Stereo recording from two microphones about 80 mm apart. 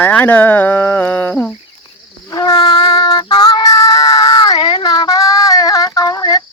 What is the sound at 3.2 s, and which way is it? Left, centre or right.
Child singing, left.